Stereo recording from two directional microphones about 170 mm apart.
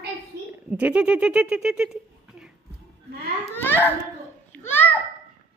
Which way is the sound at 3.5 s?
10° left (ahead or behind).